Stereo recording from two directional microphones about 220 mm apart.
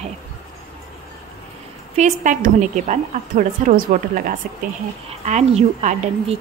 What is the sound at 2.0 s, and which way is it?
A woman's voice, 35° right (ahead or behind).